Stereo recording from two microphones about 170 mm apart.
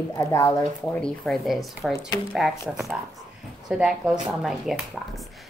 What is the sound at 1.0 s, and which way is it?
Speech, 5° left (ahead or behind).